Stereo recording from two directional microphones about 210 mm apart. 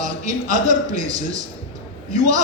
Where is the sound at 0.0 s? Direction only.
35° right (ahead or behind).